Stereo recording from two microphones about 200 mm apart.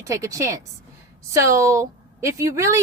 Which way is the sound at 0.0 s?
15° right (ahead or behind).